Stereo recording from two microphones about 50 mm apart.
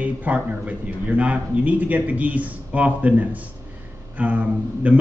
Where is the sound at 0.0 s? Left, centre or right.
Right.